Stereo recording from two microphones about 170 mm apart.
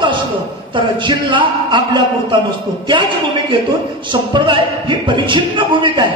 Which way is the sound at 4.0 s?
30° right (ahead or behind).